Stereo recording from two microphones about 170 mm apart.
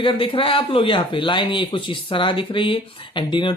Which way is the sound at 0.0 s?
30° left (ahead or behind).